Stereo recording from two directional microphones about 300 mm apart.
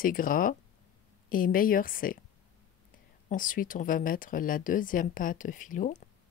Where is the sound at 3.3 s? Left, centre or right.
Left.